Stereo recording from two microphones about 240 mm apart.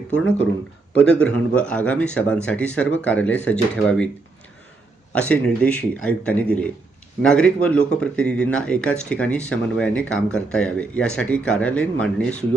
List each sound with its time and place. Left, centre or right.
0.9 s speech: centre
5.3 s speech: centre